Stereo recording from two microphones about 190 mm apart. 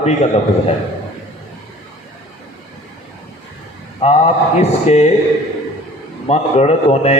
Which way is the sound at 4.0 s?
35° left (ahead or behind).